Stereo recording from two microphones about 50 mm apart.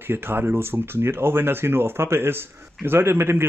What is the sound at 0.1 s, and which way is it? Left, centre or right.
Speech, right.